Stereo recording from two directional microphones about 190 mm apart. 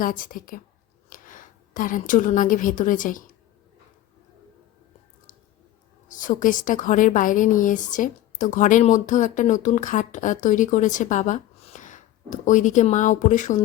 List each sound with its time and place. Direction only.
0.0 s a woman's voice: 45° left (ahead or behind)
6.1 s a woman's voice: 45° left (ahead or behind)